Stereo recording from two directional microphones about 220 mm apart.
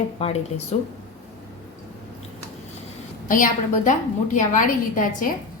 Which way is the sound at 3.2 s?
40° left (ahead or behind).